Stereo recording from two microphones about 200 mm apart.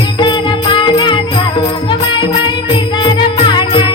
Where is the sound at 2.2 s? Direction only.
25° left (ahead or behind).